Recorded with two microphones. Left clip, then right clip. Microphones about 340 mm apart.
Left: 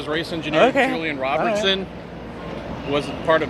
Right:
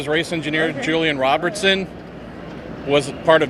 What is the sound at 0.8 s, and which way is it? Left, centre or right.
Speech, right.